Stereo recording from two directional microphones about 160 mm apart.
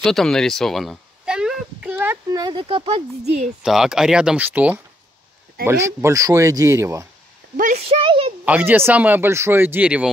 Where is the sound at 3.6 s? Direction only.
5° right (ahead or behind).